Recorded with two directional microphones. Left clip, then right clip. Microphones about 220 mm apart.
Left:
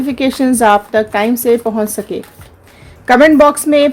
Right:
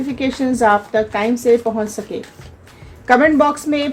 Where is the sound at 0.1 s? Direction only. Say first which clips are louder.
Left 6 dB; 45° left (ahead or behind).